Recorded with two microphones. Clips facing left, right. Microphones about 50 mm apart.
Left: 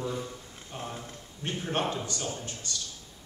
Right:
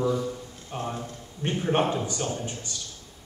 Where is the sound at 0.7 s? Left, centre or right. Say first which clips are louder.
Right 6 dB; centre.